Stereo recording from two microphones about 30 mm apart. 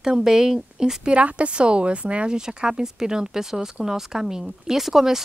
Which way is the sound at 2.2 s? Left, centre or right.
Right.